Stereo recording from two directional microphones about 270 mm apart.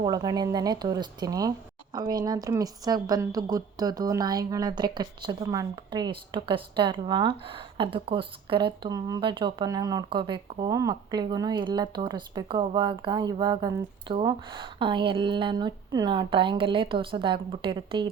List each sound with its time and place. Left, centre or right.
0.0 s speech: centre